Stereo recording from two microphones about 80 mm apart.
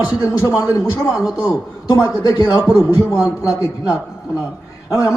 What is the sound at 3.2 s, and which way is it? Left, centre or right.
Speech, left.